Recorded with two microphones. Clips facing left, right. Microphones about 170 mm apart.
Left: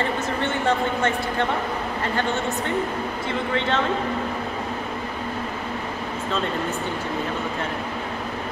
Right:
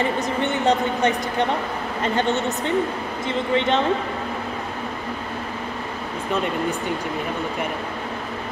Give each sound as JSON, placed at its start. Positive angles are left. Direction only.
{"t": 0.4, "sound": "a woman's voice", "side_deg": -15}